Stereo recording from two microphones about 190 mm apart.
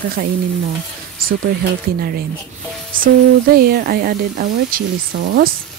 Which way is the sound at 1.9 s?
50° right (ahead or behind).